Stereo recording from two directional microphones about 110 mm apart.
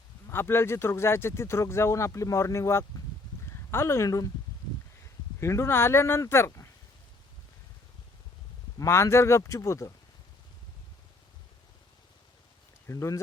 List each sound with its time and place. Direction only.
0.3 s speech: 20° left (ahead or behind)
5.4 s speech: 25° left (ahead or behind)
8.8 s speech: 25° left (ahead or behind)
12.9 s speech: 25° left (ahead or behind)